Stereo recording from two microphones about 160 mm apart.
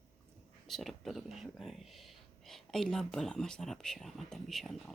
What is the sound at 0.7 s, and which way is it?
Speech, centre (ahead or behind).